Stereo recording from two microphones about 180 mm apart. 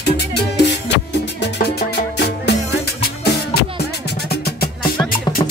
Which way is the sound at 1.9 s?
70° left (ahead or behind).